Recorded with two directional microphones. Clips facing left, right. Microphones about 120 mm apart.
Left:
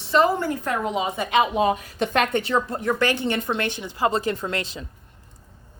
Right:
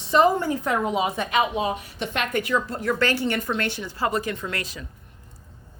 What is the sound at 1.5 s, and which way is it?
Speech, 45° left (ahead or behind).